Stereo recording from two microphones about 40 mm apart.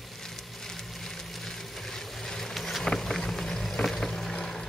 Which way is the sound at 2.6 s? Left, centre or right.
Centre.